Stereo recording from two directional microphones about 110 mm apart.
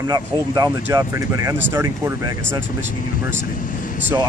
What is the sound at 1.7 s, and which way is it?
Speech, 20° right (ahead or behind).